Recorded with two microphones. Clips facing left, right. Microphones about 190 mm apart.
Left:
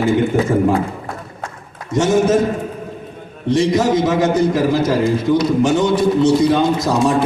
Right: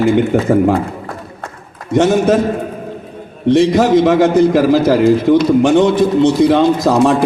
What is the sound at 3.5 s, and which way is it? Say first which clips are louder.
A man's voice: right 4 dB; 60° right (ahead or behind).